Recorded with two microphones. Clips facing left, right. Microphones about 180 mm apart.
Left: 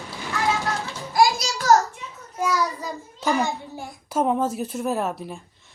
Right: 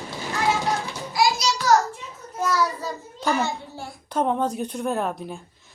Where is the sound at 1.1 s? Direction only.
50° left (ahead or behind).